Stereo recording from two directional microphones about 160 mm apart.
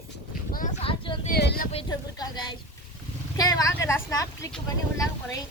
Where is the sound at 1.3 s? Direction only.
80° left.